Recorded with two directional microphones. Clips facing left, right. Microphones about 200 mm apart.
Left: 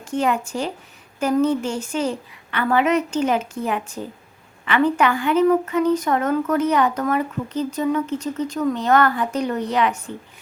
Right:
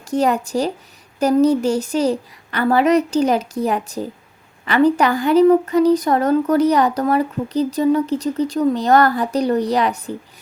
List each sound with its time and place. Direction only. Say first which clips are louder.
0.0 s speech: right 4 dB; 40° right (ahead or behind)